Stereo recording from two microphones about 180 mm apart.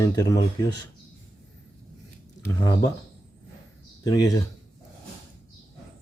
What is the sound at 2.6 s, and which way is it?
Speech, 20° left (ahead or behind).